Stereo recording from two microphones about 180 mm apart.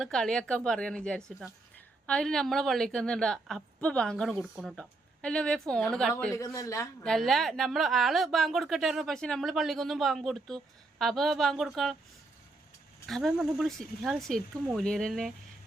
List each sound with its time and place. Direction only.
0.0 s speech: 5° left (ahead or behind)
6.3 s speech: 20° left (ahead or behind)
7.0 s speech: centre (ahead or behind)
13.1 s speech: centre (ahead or behind)